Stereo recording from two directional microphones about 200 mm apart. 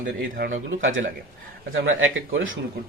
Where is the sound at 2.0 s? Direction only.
75° right (ahead or behind).